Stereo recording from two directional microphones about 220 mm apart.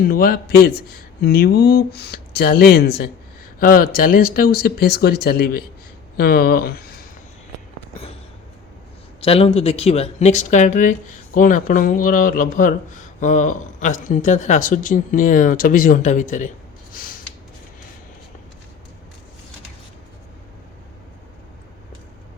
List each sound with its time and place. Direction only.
0.0 s speech: 40° left (ahead or behind)
9.2 s speech: 25° left (ahead or behind)
16.9 s a sound: 40° left (ahead or behind)